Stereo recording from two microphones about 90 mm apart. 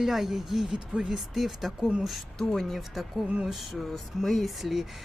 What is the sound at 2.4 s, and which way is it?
Speech, 5° left (ahead or behind).